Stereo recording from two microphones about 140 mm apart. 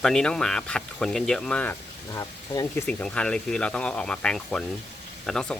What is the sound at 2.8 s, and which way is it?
Speech, 10° left (ahead or behind).